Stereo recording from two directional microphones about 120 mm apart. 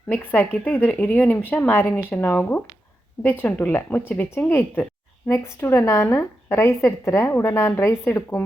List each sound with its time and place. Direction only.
0.1 s a woman's voice: 15° left (ahead or behind)